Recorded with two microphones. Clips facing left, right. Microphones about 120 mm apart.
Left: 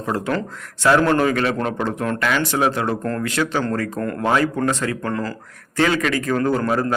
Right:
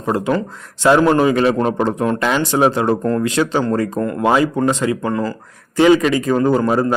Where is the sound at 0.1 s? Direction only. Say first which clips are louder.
Right 5 dB; 15° right (ahead or behind).